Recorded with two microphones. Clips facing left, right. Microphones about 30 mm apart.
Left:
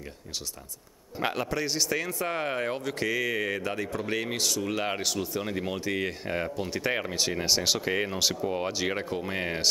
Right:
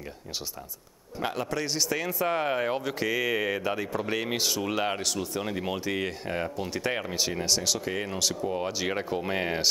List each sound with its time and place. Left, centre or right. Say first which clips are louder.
1.2 s speech: left 1 dB; centre
4.8 s speech: even; centre
7.3 s speech: left 3 dB; centre